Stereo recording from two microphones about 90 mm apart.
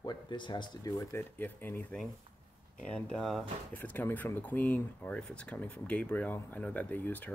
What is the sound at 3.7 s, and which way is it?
Speech, 20° left (ahead or behind).